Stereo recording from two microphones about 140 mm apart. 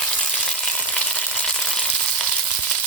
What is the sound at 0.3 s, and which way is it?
Frying, 5° left (ahead or behind).